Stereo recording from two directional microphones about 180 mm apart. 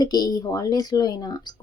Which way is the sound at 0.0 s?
20° left (ahead or behind).